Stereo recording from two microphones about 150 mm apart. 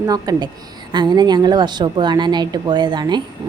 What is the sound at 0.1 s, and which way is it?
A woman's voice, 25° right (ahead or behind).